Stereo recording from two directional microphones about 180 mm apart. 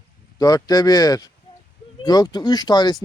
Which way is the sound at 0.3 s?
20° left (ahead or behind).